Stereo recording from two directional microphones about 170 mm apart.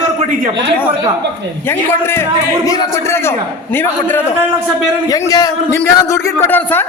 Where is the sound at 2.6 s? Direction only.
15° left (ahead or behind).